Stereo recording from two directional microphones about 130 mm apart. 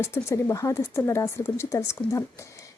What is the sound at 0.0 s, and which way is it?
A woman's voice, 20° left (ahead or behind).